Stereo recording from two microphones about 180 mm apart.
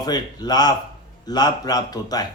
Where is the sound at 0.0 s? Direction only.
20° left (ahead or behind).